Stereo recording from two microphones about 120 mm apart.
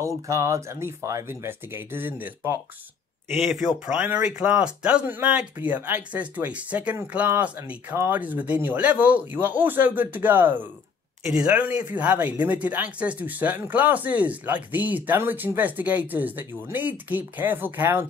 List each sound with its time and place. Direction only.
0.0 s speech: 25° right (ahead or behind)
3.3 s speech: centre (ahead or behind); by 18.0 s 15° right (ahead or behind)